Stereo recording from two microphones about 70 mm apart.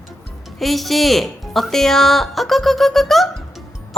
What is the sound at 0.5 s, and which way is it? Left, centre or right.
Speech, centre.